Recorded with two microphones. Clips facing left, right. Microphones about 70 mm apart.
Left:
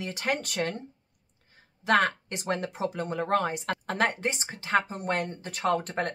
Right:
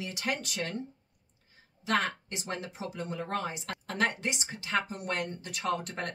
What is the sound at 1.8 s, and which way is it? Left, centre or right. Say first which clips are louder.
Speech: left 6 dB; left.